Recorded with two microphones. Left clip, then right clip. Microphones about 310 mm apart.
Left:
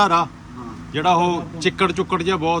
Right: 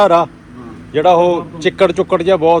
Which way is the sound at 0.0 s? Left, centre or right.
Centre.